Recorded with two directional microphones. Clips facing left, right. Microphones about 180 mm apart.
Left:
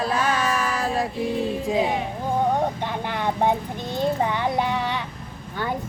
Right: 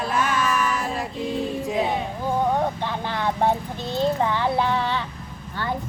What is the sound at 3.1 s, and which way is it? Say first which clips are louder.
Vehicle: even; 15° left (ahead or behind).